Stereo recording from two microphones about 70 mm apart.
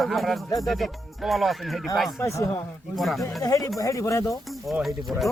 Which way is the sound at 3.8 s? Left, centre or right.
Left.